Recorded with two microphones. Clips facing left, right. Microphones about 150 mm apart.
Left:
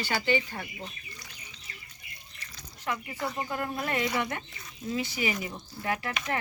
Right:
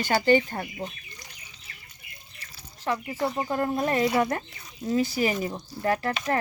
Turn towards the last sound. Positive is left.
turn(degrees=-40)  # may be behind; listen again after turning